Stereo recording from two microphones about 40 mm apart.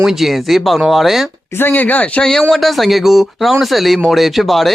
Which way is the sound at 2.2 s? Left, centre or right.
Centre.